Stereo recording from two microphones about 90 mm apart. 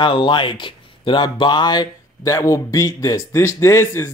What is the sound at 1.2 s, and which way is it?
Speech, 55° left (ahead or behind).